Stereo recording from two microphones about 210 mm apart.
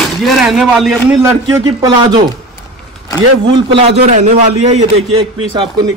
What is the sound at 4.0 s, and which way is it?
A man's voice, 30° right (ahead or behind).